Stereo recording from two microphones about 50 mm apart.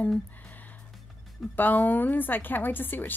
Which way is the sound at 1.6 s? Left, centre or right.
Left.